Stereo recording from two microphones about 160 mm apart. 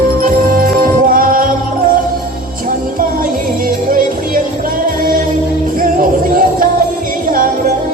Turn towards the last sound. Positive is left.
turn(degrees=-60)  # may be behind; listen again after turning